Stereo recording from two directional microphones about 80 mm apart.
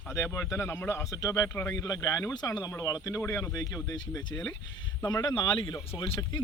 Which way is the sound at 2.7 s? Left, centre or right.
Left.